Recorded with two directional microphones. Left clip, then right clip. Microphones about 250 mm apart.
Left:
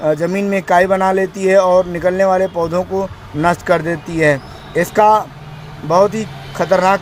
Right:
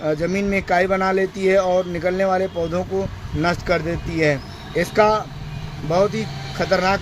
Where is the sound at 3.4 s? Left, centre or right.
Centre.